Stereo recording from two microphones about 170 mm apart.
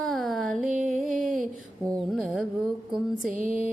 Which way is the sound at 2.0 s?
5° right (ahead or behind).